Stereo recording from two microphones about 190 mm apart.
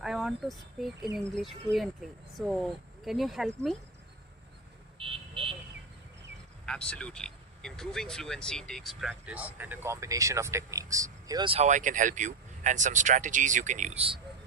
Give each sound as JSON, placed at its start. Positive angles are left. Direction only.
{"t": 0.0, "sound": "speech", "side_deg": 0}
{"t": 4.9, "sound": "vehicle", "side_deg": -30}
{"t": 6.7, "sound": "speech", "side_deg": 5}